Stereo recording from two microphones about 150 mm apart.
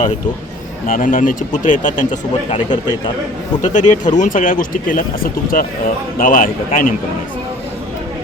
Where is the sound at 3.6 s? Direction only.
55° left (ahead or behind).